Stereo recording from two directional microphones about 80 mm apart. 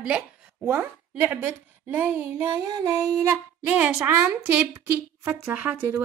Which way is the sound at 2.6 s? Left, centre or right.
Right.